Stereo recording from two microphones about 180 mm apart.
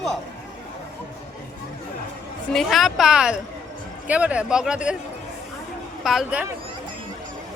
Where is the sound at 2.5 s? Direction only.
Centre (ahead or behind).